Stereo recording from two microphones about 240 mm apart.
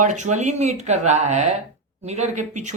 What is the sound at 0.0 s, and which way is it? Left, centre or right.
Speech, right.